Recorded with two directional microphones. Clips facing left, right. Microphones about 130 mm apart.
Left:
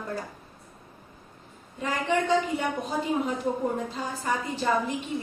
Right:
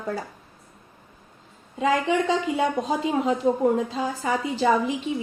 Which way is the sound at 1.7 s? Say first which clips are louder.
Right 5 dB; 90° right.